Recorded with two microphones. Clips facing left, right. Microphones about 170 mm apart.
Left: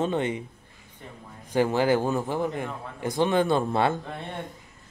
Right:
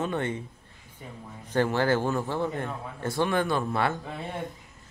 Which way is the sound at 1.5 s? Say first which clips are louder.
Left 2 dB; 15° left (ahead or behind).